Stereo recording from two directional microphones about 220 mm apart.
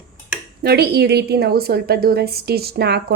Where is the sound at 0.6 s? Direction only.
45° right (ahead or behind).